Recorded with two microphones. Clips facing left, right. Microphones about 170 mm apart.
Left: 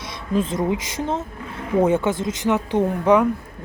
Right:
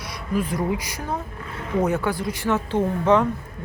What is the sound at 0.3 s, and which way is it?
Speech, 25° left (ahead or behind).